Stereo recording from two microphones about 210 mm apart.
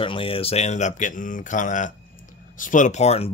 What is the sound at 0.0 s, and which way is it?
Speech, 25° left (ahead or behind).